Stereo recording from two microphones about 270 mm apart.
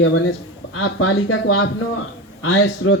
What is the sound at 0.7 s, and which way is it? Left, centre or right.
Speech, left.